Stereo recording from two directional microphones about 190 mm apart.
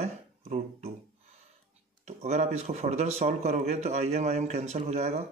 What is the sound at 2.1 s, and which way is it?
Speech, 40° right (ahead or behind).